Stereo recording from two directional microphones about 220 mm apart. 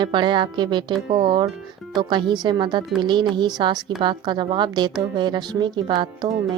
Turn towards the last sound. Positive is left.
turn(degrees=-20)  # may be behind; listen again after turning